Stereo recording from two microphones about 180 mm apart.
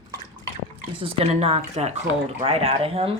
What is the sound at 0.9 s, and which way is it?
Speech, 30° right (ahead or behind).